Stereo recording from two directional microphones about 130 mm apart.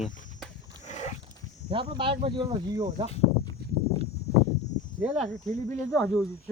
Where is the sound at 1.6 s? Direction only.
45° right (ahead or behind).